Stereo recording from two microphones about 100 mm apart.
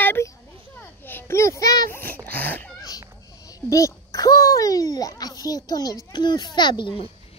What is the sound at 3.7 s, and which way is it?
A child's voice, 35° left (ahead or behind).